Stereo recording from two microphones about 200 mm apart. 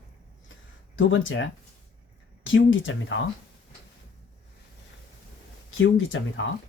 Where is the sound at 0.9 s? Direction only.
70° left (ahead or behind).